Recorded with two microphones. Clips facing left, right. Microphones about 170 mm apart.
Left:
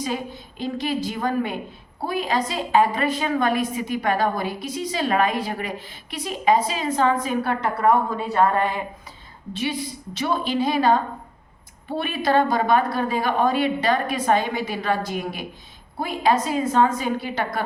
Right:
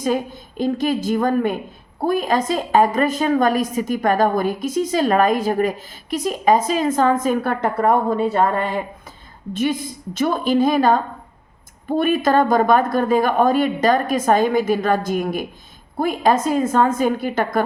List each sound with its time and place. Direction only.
0.0 s a woman's voice: 45° right (ahead or behind)
9.5 s a woman's voice: 50° right (ahead or behind)